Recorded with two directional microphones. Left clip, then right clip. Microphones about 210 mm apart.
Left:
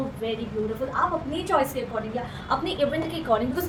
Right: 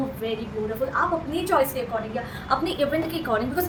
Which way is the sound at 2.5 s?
20° right (ahead or behind).